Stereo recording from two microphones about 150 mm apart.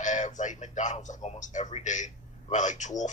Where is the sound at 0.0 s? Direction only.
55° left (ahead or behind).